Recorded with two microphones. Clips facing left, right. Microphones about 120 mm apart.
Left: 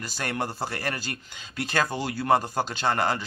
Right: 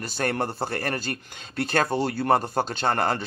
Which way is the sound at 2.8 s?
45° right (ahead or behind).